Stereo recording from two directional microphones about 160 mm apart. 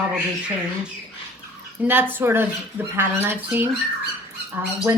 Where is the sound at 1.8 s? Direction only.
10° right (ahead or behind).